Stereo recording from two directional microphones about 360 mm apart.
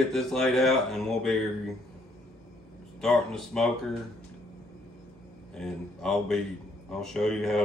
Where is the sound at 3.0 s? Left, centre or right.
Centre.